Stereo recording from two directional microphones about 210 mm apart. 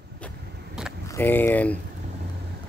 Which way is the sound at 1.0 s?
10° left (ahead or behind).